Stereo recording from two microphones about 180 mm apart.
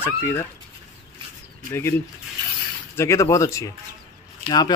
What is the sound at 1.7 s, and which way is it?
Speech, 15° left (ahead or behind).